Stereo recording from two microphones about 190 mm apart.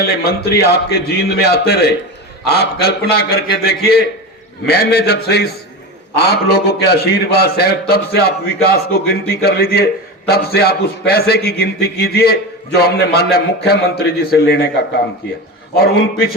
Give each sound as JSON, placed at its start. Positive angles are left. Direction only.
{"t": 0.2, "sound": "a man's voice", "side_deg": 55}
{"t": 15.7, "sound": "a man's voice", "side_deg": 55}